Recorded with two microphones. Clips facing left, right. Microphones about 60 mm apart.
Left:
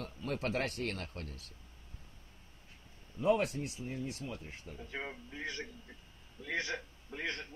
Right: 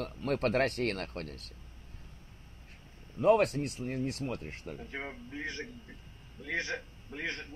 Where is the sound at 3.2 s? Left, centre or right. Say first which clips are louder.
Right 5 dB; right.